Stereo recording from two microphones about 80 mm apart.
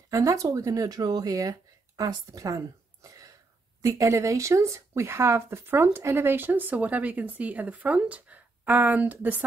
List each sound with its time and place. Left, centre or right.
0.1 s speech: right